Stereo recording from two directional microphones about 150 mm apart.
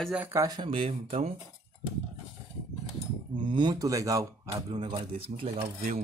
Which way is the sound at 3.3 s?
30° right (ahead or behind).